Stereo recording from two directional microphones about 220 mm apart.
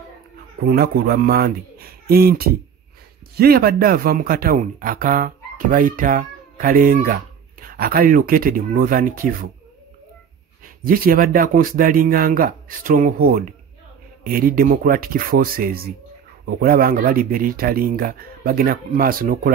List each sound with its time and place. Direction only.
0.7 s a man's voice: 45° right (ahead or behind)
10.9 s speech: 40° right (ahead or behind)